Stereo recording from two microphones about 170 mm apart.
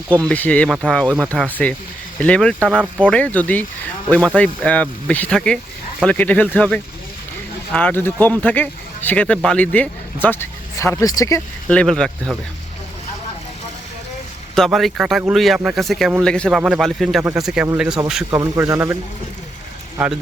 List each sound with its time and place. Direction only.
0.2 s speech: 5° left (ahead or behind)
11.7 s speech: 5° left (ahead or behind)
14.5 s speech: centre (ahead or behind)
18.3 s speech: 20° right (ahead or behind)